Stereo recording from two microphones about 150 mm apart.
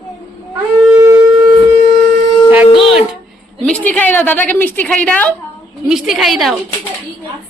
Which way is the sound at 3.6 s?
10° left (ahead or behind).